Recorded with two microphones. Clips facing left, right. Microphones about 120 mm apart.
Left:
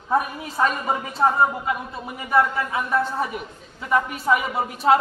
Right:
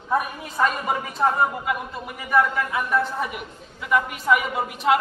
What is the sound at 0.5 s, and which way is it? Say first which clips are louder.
Speech: even; 25° left (ahead or behind).